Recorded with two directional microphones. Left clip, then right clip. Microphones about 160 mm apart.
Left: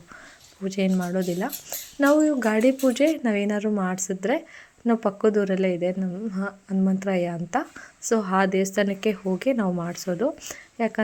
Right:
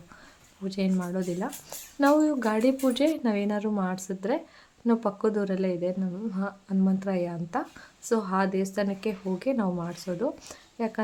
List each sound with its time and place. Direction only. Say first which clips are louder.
0.6 s a woman's voice: left 5 dB; 20° left (ahead or behind)